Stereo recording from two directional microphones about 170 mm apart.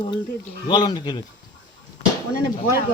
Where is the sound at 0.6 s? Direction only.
25° left (ahead or behind).